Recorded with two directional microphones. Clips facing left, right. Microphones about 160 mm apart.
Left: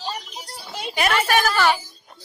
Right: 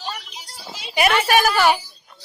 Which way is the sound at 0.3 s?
55° left (ahead or behind).